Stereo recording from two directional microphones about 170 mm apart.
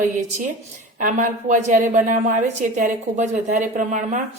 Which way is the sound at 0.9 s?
50° right (ahead or behind).